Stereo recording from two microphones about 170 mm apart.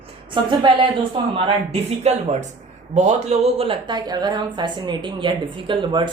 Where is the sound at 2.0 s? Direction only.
45° right (ahead or behind).